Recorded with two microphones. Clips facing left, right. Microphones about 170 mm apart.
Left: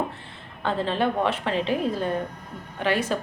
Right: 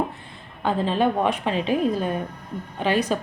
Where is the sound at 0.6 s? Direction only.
15° right (ahead or behind).